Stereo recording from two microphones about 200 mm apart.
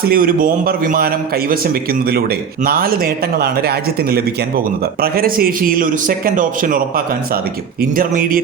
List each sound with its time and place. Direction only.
0.0 s speech: 45° right (ahead or behind)